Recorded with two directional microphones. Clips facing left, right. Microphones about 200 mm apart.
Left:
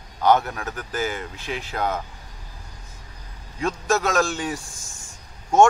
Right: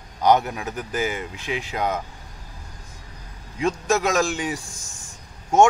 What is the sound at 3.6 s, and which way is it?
Speech, 15° right (ahead or behind).